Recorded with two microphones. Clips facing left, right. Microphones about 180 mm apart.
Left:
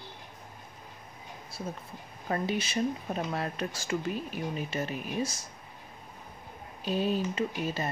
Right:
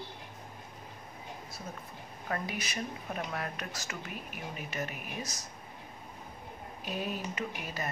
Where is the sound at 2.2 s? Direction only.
25° left (ahead or behind).